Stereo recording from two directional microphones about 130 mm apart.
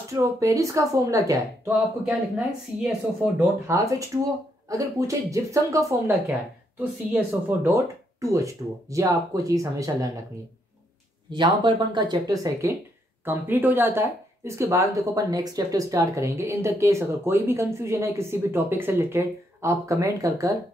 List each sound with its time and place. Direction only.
0.1 s speech: 25° right (ahead or behind)
2.0 s a woman's voice: 5° right (ahead or behind)
3.6 s speech: 25° right (ahead or behind)
6.8 s speech: 15° right (ahead or behind)
11.3 s speech: 40° right (ahead or behind)
13.2 s speech: 15° right (ahead or behind)